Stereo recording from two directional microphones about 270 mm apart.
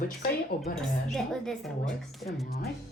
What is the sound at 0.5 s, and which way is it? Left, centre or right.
Speech, left.